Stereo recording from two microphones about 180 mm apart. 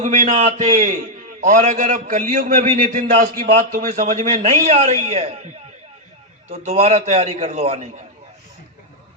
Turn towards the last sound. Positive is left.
turn(degrees=-35)  # may be behind; listen again after turning